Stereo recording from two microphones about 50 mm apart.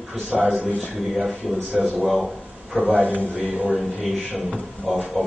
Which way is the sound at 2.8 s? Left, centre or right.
Right.